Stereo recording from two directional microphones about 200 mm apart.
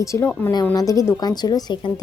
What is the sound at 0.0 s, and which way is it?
A woman's voice, 15° left (ahead or behind).